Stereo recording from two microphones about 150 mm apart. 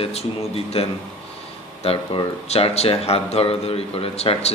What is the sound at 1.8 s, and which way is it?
Speech, 40° left (ahead or behind).